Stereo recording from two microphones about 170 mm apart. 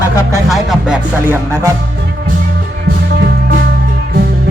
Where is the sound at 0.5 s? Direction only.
5° right (ahead or behind).